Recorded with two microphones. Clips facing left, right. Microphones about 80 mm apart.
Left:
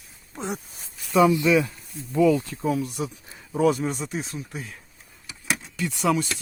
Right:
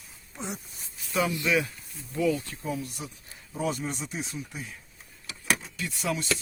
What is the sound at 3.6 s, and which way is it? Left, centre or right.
Speech, left.